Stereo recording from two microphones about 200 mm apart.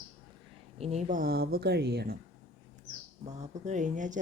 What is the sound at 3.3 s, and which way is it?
Speech, 35° right (ahead or behind).